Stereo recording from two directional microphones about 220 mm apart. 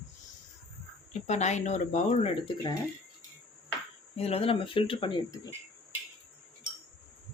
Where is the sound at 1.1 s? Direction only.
30° left (ahead or behind).